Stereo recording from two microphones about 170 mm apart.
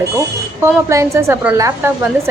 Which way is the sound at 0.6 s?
15° right (ahead or behind).